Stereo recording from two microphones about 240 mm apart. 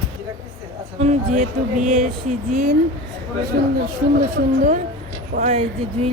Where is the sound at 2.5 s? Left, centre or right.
Right.